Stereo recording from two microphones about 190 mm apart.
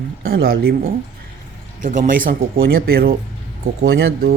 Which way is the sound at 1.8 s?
45° right (ahead or behind).